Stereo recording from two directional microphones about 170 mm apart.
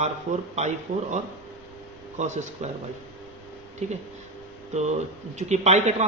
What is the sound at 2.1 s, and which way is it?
Speech, 45° right (ahead or behind).